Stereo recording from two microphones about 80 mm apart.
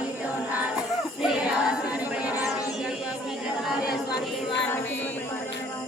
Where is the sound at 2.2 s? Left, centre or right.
Centre.